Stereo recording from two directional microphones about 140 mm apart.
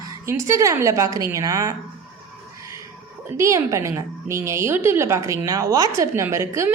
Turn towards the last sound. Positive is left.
turn(degrees=-20)  # may be behind; listen again after turning